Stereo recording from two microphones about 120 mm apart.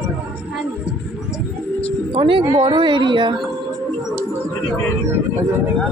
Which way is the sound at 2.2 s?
45° right (ahead or behind).